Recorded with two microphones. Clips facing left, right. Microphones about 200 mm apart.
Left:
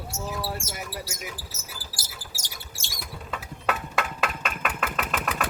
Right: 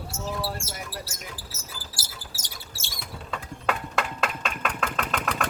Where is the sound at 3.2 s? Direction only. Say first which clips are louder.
Even; 5° left (ahead or behind).